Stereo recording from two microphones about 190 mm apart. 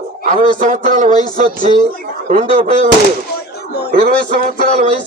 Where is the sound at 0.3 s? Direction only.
45° right (ahead or behind).